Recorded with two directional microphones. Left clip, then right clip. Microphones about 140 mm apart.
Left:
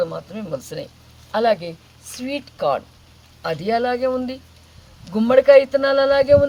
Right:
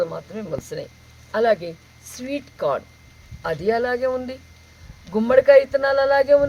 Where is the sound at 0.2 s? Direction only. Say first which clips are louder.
Left 1 dB; 10° right (ahead or behind).